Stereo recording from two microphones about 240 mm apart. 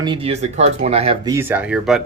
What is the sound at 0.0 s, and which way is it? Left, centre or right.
Speech, right.